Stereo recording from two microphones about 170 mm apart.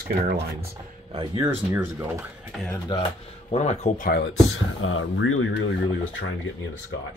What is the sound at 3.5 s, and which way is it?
Speech, 40° left (ahead or behind).